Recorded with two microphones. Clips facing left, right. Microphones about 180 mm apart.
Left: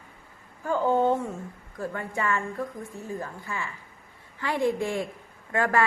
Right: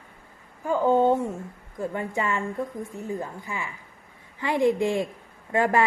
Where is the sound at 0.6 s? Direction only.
15° right (ahead or behind).